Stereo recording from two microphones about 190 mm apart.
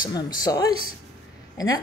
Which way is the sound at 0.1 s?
20° left (ahead or behind).